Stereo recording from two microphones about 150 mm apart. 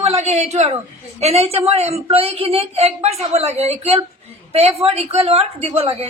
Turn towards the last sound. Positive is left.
turn(degrees=-40)  # may be behind; listen again after turning